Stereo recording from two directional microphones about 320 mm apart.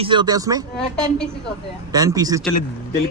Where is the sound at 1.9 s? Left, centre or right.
Centre.